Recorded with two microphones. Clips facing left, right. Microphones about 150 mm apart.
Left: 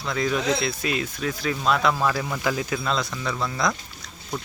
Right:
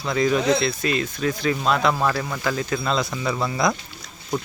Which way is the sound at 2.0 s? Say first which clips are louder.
Right 1 dB; 5° left (ahead or behind).